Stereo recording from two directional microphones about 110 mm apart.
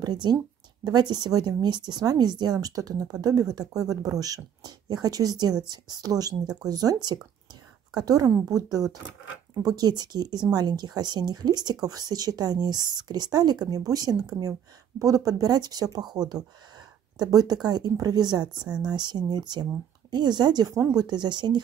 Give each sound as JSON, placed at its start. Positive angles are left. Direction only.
{"t": 0.0, "sound": "speech", "side_deg": -40}